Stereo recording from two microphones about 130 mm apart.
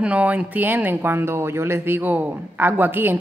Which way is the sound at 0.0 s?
10° right (ahead or behind).